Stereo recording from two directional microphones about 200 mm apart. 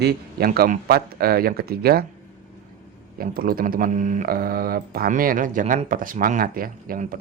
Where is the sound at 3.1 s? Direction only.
45° right (ahead or behind).